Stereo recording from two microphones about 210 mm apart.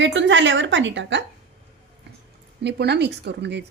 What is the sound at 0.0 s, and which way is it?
A woman's voice, 60° right (ahead or behind).